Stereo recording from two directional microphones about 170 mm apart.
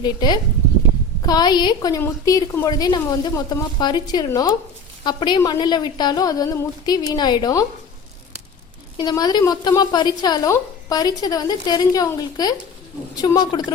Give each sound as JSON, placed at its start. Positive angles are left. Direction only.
{"t": 0.0, "sound": "a woman's voice", "side_deg": 25}
{"t": 9.0, "sound": "a woman's voice", "side_deg": 25}